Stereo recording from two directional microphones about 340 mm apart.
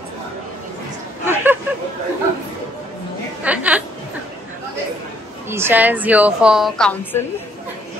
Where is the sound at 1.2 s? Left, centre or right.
Centre.